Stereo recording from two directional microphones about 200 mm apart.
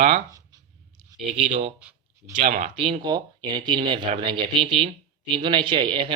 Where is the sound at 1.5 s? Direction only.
30° right (ahead or behind).